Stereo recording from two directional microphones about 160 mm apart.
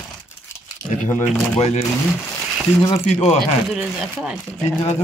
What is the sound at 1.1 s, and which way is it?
Speech, 45° left (ahead or behind).